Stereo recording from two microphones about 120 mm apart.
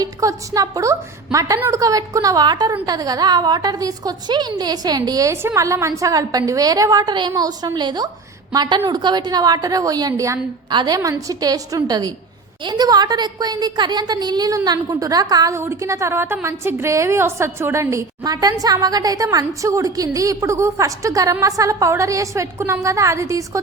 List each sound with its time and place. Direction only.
0.0 s a woman's voice: 30° right (ahead or behind)
10.7 s a woman's voice: 35° right (ahead or behind)